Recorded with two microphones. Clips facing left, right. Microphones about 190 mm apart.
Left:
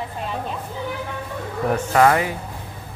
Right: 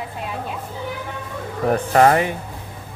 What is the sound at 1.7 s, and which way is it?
Speech, 35° right (ahead or behind).